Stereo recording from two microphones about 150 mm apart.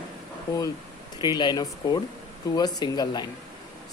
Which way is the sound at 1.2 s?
30° left (ahead or behind).